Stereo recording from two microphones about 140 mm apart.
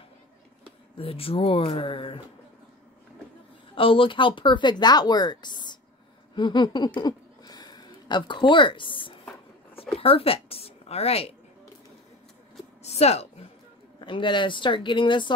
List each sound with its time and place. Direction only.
0.9 s speech: 45° left (ahead or behind)
3.7 s a woman's voice: 40° left (ahead or behind)
12.8 s a woman's voice: 50° left (ahead or behind)
14.0 s speech: 35° left (ahead or behind)